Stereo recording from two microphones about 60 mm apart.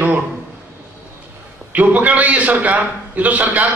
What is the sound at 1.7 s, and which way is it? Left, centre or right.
A man's voice, right.